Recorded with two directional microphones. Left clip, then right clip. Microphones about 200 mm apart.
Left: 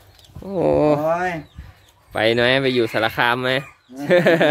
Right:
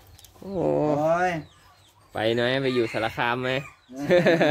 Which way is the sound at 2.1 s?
20° left (ahead or behind).